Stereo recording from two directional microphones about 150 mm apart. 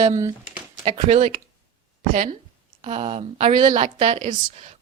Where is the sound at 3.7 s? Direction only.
55° right (ahead or behind).